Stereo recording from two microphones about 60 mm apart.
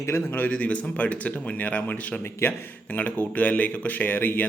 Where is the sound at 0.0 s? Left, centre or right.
Left.